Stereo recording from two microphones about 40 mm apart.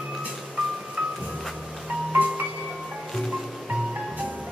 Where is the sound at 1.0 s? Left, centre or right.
Centre.